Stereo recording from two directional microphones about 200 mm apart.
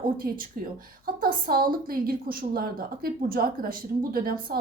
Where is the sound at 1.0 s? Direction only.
45° right (ahead or behind).